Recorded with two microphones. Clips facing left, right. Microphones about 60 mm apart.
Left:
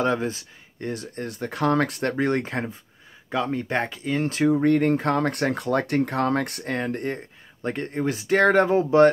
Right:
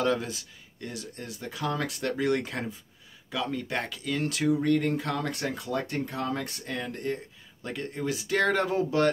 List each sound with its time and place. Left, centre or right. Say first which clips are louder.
0.0 s speech: left 4 dB; left